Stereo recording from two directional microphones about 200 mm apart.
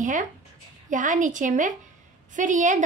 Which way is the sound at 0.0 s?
40° right (ahead or behind).